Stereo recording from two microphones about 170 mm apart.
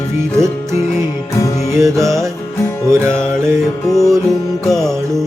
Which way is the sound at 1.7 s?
15° right (ahead or behind).